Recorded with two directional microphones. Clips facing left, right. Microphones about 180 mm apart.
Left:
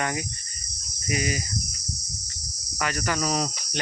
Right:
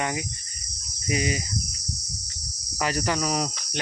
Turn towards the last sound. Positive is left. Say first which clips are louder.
# even
turn(degrees=-15)  # may be behind; listen again after turning